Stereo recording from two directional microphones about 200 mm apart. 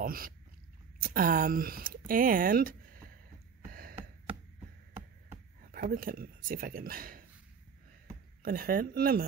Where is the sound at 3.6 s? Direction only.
45° right (ahead or behind).